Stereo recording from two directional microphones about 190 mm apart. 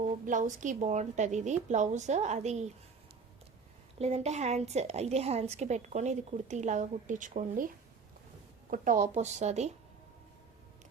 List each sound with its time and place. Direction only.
0.1 s a woman's voice: 40° right (ahead or behind)
3.9 s a woman's voice: 35° right (ahead or behind)
8.7 s a woman's voice: 45° right (ahead or behind)